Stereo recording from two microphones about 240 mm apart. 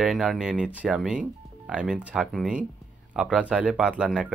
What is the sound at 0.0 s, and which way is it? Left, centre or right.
Speech, centre.